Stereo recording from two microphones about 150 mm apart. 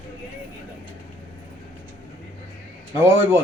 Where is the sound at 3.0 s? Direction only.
15° right (ahead or behind).